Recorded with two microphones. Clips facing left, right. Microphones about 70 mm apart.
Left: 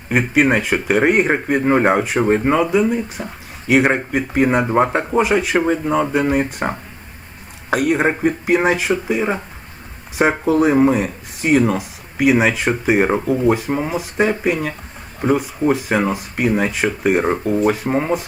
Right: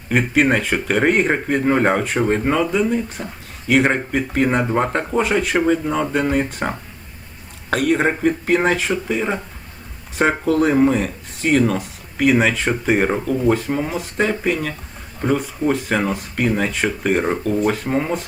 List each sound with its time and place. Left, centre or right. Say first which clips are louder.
0.1 s speech: left 1 dB; centre